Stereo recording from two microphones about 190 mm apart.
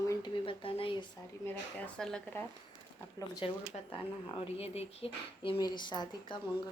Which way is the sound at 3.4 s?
30° left (ahead or behind).